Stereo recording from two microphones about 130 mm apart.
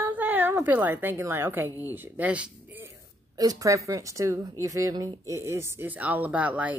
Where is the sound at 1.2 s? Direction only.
15° right (ahead or behind).